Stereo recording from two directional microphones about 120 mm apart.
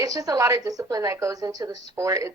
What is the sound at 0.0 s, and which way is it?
Speech, 30° right (ahead or behind).